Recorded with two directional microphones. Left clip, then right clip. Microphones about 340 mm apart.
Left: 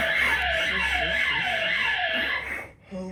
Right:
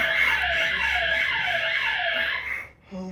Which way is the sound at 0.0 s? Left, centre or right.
Centre.